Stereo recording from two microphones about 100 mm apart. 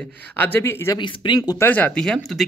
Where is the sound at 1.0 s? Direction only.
50° left (ahead or behind).